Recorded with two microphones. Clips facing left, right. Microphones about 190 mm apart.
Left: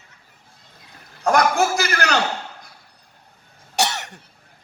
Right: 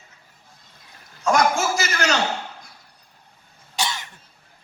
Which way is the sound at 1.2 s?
60° left (ahead or behind).